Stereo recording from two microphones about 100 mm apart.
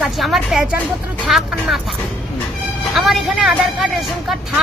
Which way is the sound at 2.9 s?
Centre (ahead or behind).